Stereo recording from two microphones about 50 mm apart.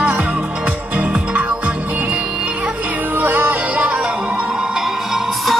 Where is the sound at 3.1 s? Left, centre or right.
Right.